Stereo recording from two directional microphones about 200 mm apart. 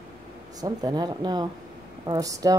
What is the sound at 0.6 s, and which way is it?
A woman's voice, 20° right (ahead or behind).